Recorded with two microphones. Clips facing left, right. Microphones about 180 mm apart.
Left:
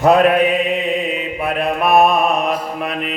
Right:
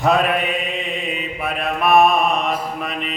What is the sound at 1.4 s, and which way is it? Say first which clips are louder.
Mantra: left 3 dB; centre (ahead or behind).